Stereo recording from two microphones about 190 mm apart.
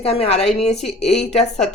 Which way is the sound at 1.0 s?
35° left (ahead or behind).